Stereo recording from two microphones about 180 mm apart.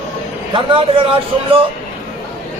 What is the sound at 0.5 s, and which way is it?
A man's voice, 30° right (ahead or behind).